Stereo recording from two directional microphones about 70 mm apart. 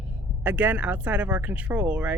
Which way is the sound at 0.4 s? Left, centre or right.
Right.